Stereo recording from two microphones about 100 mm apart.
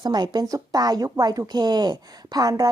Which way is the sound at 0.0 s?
45° right (ahead or behind).